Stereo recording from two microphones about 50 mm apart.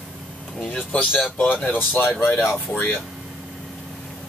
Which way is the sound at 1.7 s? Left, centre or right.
Left.